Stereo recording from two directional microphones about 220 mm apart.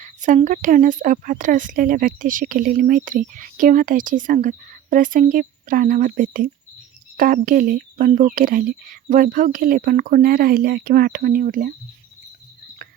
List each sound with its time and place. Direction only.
0.0 s a woman's voice: 35° right (ahead or behind)